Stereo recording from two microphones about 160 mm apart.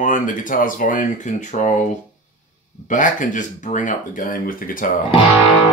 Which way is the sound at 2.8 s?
55° left (ahead or behind).